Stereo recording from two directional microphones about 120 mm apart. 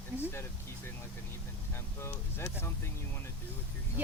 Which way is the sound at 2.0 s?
20° left (ahead or behind).